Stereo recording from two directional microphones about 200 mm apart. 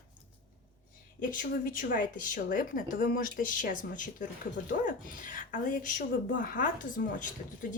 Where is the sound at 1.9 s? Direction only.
45° left (ahead or behind).